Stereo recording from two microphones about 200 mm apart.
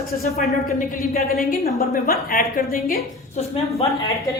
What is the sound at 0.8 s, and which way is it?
A woman's voice, 45° left (ahead or behind).